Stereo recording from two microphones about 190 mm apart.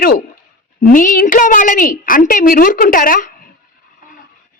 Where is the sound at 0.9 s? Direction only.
45° left (ahead or behind).